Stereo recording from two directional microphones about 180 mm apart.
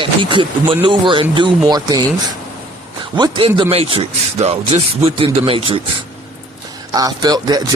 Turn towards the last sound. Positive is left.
turn(degrees=-20)  # may be behind; listen again after turning